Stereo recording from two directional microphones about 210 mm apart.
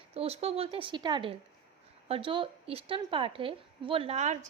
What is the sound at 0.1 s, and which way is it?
A woman's voice, 30° right (ahead or behind).